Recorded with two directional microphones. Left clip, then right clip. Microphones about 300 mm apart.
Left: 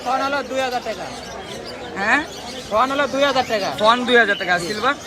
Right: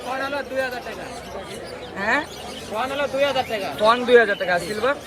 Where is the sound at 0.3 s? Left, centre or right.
Left.